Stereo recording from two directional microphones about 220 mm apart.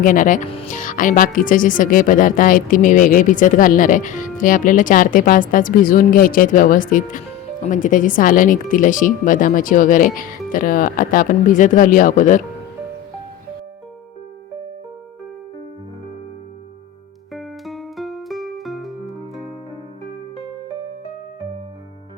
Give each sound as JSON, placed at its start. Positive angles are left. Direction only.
{"t": 0.0, "sound": "speech", "side_deg": 35}
{"t": 17.3, "sound": "music", "side_deg": 0}